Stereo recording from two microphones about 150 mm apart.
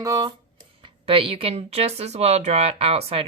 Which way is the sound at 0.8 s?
35° right (ahead or behind).